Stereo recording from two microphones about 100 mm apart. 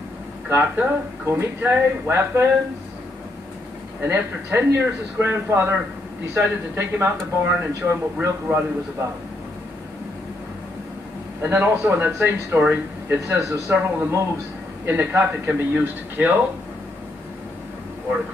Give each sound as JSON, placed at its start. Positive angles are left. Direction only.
{"t": 0.5, "sound": "speech", "side_deg": -20}
{"t": 4.0, "sound": "speech", "side_deg": -25}
{"t": 11.4, "sound": "speech", "side_deg": -25}